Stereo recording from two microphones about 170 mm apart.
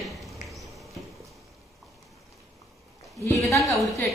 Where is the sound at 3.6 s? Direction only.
Centre (ahead or behind).